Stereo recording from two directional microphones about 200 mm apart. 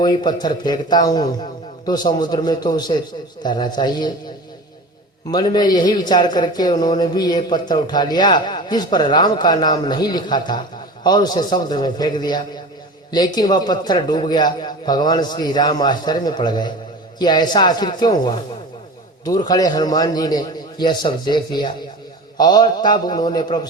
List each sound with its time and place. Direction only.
0.0 s a man's voice: 20° left (ahead or behind)
5.3 s a man's voice: 20° left (ahead or behind)